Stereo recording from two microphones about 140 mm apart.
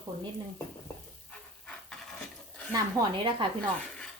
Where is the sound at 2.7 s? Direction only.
30° right (ahead or behind).